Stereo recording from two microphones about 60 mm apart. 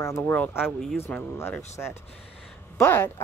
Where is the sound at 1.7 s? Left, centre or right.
Left.